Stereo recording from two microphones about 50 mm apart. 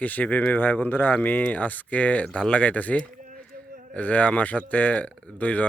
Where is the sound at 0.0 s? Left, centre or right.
Left.